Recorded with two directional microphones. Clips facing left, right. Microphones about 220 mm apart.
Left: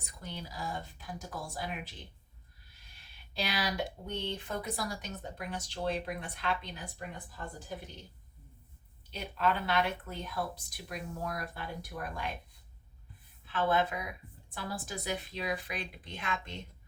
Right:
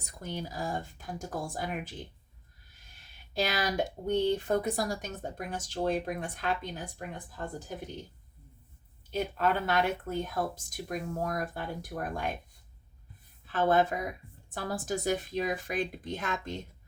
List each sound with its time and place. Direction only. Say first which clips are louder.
0.0 s speech: right 6 dB; 45° right (ahead or behind)
9.0 s speech: right 3 dB; 45° right (ahead or behind)
13.5 s speech: right 4 dB; 45° right (ahead or behind)